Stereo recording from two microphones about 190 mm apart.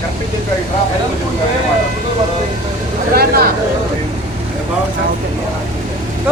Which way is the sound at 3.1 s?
55° right (ahead or behind).